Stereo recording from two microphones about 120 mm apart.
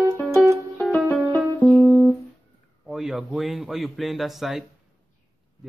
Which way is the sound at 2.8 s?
5° right (ahead or behind).